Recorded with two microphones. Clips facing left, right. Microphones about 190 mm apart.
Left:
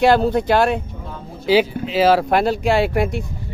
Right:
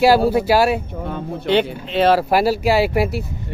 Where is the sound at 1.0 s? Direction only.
65° right (ahead or behind).